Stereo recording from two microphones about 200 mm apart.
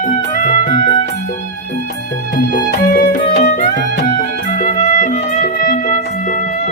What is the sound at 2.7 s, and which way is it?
Music, 50° left (ahead or behind).